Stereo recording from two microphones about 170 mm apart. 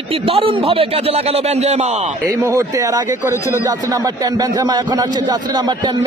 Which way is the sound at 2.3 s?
20° right (ahead or behind).